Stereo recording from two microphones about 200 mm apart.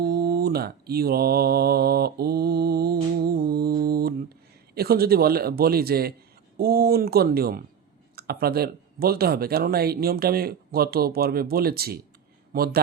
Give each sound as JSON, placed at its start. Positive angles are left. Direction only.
{"t": 0.0, "sound": "mantra", "side_deg": -50}
{"t": 4.7, "sound": "speech", "side_deg": -50}